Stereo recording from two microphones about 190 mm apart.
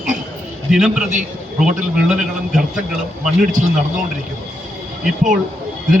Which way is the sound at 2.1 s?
5° right (ahead or behind).